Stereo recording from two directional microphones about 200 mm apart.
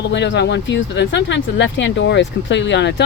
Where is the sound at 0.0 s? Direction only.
60° left (ahead or behind).